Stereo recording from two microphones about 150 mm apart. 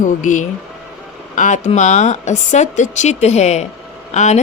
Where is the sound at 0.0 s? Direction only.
60° left (ahead or behind).